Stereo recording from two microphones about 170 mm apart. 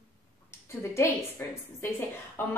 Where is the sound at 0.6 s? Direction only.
15° left (ahead or behind).